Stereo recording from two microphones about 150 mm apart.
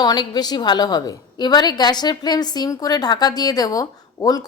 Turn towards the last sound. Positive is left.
turn(degrees=25)  # may be behind; listen again after turning